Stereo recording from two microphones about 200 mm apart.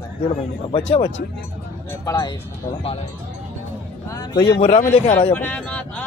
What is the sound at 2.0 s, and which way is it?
Speech, 15° left (ahead or behind).